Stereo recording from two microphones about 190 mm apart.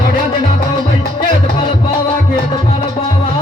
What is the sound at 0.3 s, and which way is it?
Music, 25° left (ahead or behind).